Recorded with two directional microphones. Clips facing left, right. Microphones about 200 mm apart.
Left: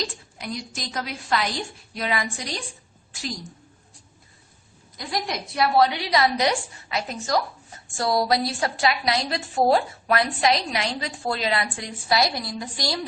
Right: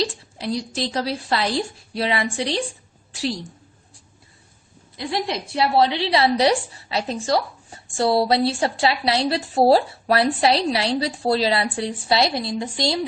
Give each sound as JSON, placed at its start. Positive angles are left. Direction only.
{"t": 0.0, "sound": "a woman's voice", "side_deg": -30}
{"t": 4.9, "sound": "a woman's voice", "side_deg": -25}